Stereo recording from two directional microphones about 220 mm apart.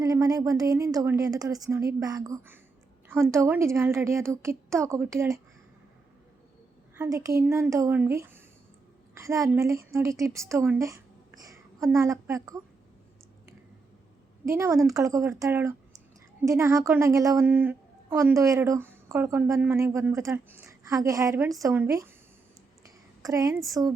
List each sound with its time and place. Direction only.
0.0 s a woman's voice: 15° right (ahead or behind)
6.9 s a woman's voice: 10° right (ahead or behind)
14.4 s a woman's voice: 15° right (ahead or behind)
23.2 s a woman's voice: 15° right (ahead or behind)